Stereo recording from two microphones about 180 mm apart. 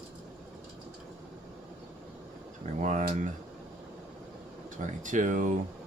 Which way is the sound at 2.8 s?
45° right (ahead or behind).